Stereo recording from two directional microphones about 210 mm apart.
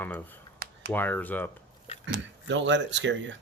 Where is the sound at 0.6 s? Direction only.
45° right (ahead or behind).